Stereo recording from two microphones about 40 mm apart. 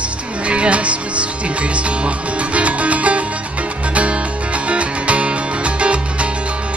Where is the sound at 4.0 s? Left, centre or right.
Right.